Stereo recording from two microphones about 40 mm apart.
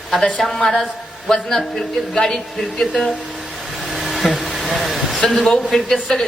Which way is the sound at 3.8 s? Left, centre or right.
Centre.